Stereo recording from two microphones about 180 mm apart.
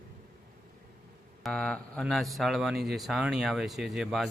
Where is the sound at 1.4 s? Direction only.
5° left (ahead or behind).